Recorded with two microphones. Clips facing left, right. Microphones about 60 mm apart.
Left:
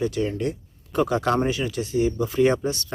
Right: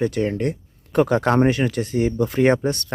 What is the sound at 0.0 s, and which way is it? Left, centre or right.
Speech, right.